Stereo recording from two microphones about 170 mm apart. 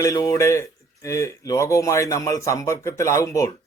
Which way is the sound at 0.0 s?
20° left (ahead or behind).